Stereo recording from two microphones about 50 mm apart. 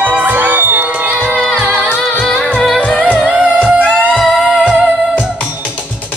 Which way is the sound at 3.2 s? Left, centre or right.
Centre.